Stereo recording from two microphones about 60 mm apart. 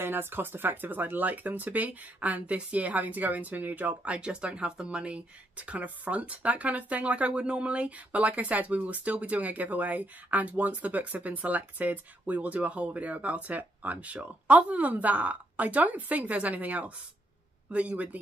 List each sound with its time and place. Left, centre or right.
0.0 s speech: right